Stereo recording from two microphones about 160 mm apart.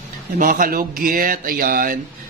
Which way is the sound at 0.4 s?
60° right (ahead or behind).